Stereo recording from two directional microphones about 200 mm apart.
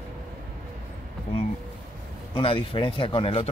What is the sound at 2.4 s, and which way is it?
Speech, 25° left (ahead or behind).